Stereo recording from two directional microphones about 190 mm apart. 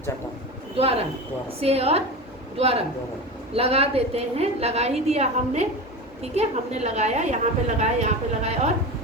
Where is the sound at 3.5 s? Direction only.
30° right (ahead or behind).